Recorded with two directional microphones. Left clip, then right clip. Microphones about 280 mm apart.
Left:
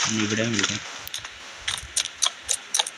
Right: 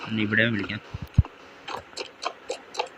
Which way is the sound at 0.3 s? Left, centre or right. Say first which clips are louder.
Right 3 dB; centre.